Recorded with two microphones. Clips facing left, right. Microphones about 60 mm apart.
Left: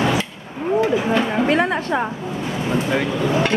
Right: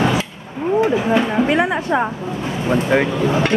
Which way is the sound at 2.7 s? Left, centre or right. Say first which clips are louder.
Right 5 dB; right.